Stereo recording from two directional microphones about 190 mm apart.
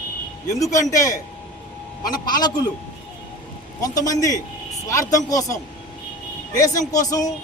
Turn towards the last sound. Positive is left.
turn(degrees=20)  # may be behind; listen again after turning